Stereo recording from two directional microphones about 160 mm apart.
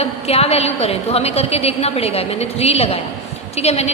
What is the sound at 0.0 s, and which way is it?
A woman's voice, 40° left (ahead or behind).